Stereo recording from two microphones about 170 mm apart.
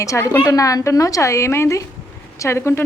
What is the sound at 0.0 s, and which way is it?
A woman's voice, 20° left (ahead or behind).